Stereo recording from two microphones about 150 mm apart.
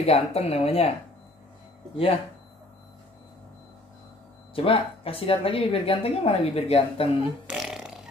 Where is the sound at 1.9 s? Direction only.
40° left (ahead or behind).